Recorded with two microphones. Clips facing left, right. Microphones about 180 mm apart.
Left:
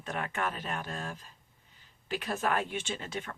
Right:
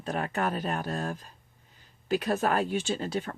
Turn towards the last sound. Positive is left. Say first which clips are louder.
# right 7 dB
turn(degrees=-35)  # may be behind; listen again after turning